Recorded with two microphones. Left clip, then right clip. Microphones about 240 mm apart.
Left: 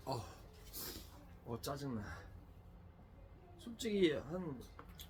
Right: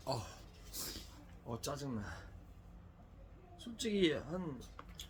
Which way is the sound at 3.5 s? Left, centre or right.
Centre.